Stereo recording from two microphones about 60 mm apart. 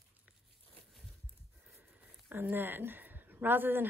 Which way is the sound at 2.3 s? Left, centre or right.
Right.